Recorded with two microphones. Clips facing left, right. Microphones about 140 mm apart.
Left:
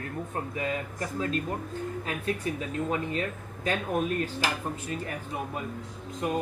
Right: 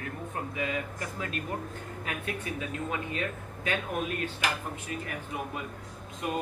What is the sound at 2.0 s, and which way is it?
Speech, 30° left (ahead or behind).